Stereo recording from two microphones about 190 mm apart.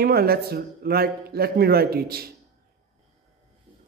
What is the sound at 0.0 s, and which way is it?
A man's voice, 55° right (ahead or behind).